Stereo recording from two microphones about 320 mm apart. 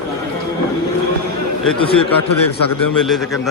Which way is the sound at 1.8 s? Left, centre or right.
Centre.